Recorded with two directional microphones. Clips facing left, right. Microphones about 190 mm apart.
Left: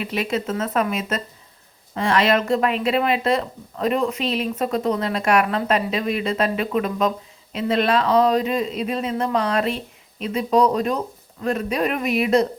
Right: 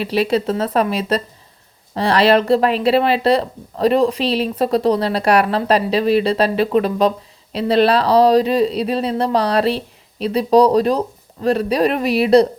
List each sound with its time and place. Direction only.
0.0 s speech: 35° right (ahead or behind)